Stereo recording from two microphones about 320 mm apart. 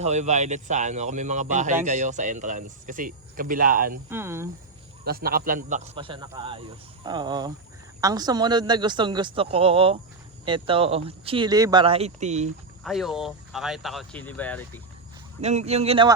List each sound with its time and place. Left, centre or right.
0.0 s speech: right
4.1 s speech: centre
5.0 s speech: right
12.8 s speech: centre
15.4 s speech: centre